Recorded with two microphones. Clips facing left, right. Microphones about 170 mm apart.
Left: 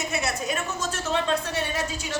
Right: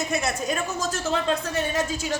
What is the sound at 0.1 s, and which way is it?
A woman's voice, 40° right (ahead or behind).